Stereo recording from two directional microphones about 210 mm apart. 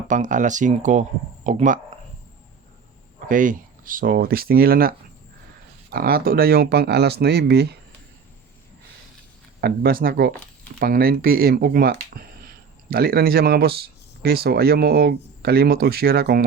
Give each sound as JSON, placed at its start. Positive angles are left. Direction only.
{"t": 0.1, "sound": "speech", "side_deg": -35}
{"t": 3.2, "sound": "speech", "side_deg": -40}
{"t": 9.6, "sound": "speech", "side_deg": -45}